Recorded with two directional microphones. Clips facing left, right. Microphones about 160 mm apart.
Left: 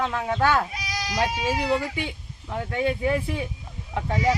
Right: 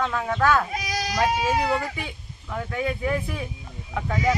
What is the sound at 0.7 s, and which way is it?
Speech, 50° right (ahead or behind).